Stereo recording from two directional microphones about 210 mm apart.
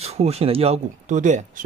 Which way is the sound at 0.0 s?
30° right (ahead or behind).